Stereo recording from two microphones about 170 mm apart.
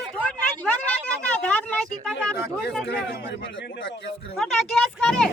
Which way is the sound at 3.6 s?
90° left.